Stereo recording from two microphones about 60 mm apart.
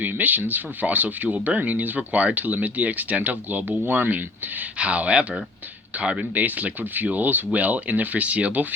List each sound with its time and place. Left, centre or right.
0.0 s speech: right
4.8 s speech: right